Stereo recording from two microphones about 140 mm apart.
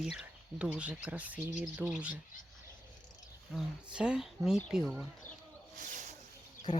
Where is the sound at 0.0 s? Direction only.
5° right (ahead or behind).